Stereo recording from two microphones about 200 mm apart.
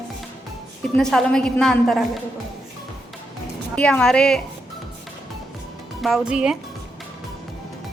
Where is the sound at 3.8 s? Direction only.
5° left (ahead or behind).